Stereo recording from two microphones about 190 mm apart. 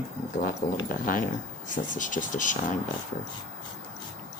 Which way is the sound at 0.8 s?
45° left (ahead or behind).